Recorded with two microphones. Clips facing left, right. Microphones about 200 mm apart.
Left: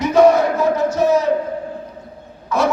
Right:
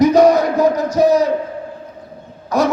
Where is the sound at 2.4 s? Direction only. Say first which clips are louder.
Right 2 dB; 40° right (ahead or behind).